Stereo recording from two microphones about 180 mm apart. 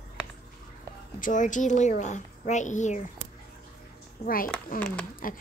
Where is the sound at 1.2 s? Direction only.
45° left (ahead or behind).